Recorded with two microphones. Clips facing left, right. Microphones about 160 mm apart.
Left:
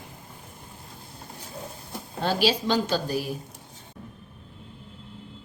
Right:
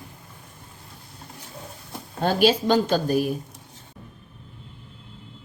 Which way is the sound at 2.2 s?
50° right (ahead or behind).